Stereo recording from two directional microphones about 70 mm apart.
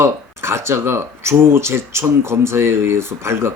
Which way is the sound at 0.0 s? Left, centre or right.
Right.